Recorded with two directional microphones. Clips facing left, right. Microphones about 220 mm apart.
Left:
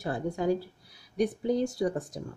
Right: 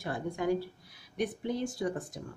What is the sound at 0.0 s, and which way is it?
A woman's voice, 35° left (ahead or behind).